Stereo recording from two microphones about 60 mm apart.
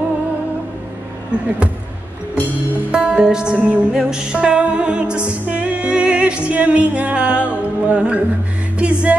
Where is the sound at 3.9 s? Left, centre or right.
Centre.